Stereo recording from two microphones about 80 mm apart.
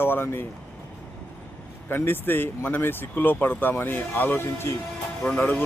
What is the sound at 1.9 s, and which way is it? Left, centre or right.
Speech, left.